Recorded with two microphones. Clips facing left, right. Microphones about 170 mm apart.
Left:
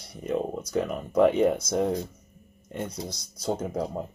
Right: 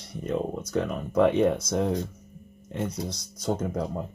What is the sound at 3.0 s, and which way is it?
Speech, 20° right (ahead or behind).